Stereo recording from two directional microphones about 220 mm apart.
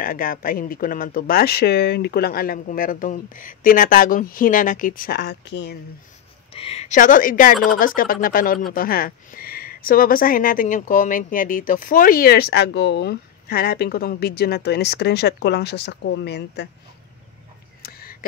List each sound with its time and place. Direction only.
0.0 s speech: 40° left (ahead or behind)
6.5 s speech: 25° left (ahead or behind); by 16.6 s 50° left (ahead or behind)
17.8 s a sound: 45° left (ahead or behind)